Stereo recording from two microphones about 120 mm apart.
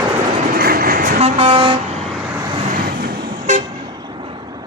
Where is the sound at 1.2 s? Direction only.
55° right (ahead or behind).